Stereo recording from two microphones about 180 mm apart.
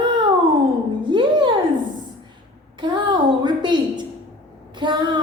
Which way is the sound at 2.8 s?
25° right (ahead or behind).